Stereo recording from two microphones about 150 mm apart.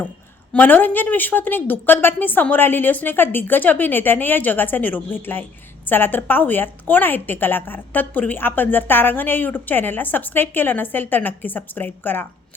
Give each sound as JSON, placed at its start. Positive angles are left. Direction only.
{"t": 0.5, "sound": "a woman's voice", "side_deg": 10}